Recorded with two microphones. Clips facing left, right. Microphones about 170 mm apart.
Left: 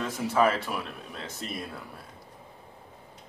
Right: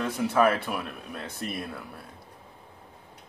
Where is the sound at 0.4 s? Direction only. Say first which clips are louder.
Right 1 dB; 60° right (ahead or behind).